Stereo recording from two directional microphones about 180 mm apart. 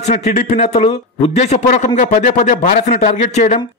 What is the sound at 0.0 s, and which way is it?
Speech, 40° left (ahead or behind).